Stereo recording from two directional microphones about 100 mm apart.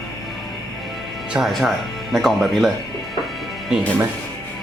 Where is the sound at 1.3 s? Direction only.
Centre (ahead or behind).